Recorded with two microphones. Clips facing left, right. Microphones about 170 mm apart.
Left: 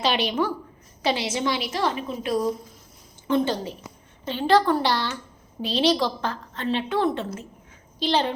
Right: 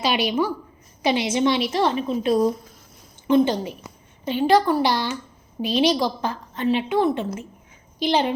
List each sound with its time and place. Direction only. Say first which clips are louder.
0.0 s a woman's voice: right 2 dB; 10° right (ahead or behind); by 2.5 s 25° right (ahead or behind)
3.2 s a woman's voice: right 5 dB; 15° right (ahead or behind)